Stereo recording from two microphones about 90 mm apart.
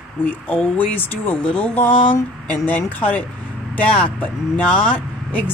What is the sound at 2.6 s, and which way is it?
Speech, 15° left (ahead or behind).